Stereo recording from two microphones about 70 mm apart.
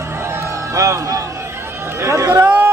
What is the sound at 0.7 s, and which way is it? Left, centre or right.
Music, right.